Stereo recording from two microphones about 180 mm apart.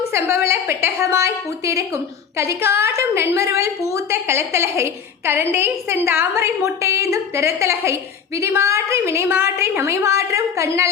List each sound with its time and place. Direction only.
0.4 s a woman's voice: 15° right (ahead or behind)